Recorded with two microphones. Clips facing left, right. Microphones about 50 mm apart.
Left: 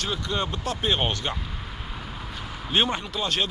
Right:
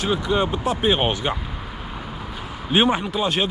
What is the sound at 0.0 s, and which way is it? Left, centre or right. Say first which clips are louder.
Speech: right 7 dB; centre.